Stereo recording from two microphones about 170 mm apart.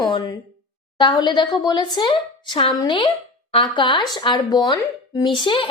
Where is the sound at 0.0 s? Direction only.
20° left (ahead or behind).